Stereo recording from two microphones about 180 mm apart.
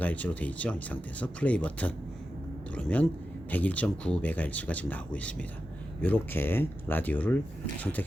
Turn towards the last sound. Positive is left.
turn(degrees=10)  # may be behind; listen again after turning